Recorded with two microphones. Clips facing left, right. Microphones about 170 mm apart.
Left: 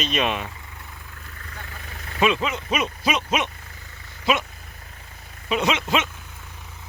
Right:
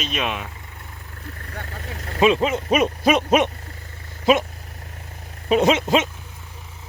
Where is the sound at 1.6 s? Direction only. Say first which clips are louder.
Right 6 dB; 55° right (ahead or behind).